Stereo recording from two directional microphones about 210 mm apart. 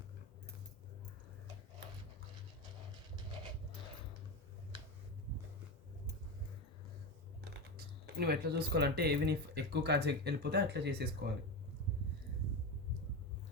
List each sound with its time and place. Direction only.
7.8 s speech: 50° right (ahead or behind)